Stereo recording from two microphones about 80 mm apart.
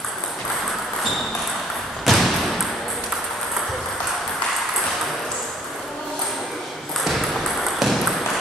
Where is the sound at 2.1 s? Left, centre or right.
Centre.